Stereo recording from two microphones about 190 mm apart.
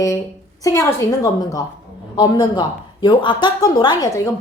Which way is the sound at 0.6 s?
15° left (ahead or behind).